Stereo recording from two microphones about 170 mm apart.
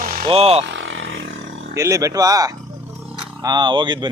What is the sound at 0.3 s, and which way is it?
Speech, 35° right (ahead or behind).